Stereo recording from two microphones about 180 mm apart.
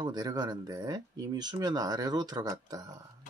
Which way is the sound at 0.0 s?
20° right (ahead or behind).